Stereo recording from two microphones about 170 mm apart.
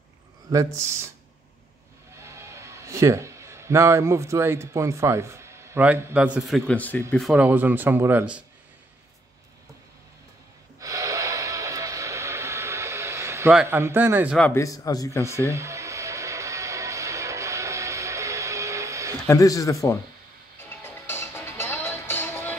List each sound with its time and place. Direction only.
0.5 s speech: 20° right (ahead or behind)
2.1 s a man's voice: 15° right (ahead or behind)
6.7 s speech: 10° left (ahead or behind)
7.2 s speech: centre (ahead or behind)
7.4 s speech: 10° right (ahead or behind)
10.8 s snort: 20° right (ahead or behind)
13.7 s speech: 15° right (ahead or behind)
14.5 s a man's voice: 20° left (ahead or behind)
15.4 s music: 15° right (ahead or behind)
19.2 s a man's voice: 20° left (ahead or behind)
20.8 s music: 15° left (ahead or behind)